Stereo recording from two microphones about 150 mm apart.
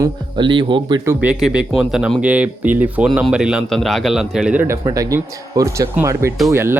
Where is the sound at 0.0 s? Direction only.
30° right (ahead or behind).